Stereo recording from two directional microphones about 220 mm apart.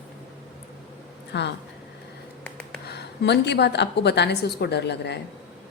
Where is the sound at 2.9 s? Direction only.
50° left (ahead or behind).